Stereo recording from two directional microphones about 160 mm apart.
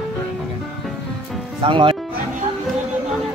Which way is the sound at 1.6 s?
35° right (ahead or behind).